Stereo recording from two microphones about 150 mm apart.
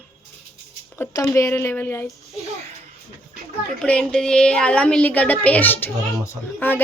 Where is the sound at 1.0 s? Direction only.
20° left (ahead or behind).